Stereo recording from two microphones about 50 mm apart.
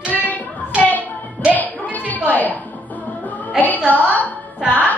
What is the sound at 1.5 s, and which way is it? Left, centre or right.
Music, left.